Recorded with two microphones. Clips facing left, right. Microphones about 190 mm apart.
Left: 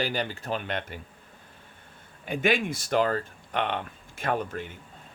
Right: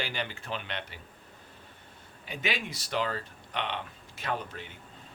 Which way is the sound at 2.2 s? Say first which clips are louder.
Left 9 dB; 50° left (ahead or behind).